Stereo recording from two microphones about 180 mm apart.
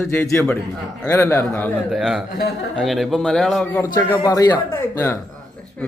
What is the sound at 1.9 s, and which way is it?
A man's voice, centre (ahead or behind).